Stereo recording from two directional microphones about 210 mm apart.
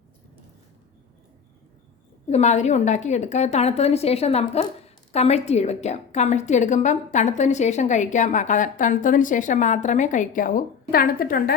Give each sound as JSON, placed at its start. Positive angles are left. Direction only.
{"t": 2.3, "sound": "a woman's voice", "side_deg": 35}